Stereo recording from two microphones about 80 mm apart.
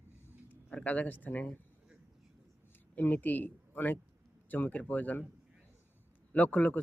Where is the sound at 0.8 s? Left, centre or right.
Centre.